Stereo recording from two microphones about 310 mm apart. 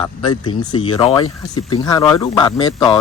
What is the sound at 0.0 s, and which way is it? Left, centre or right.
Speech, centre.